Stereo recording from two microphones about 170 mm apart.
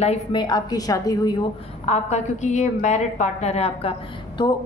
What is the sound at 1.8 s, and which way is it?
A woman's voice, 40° left (ahead or behind).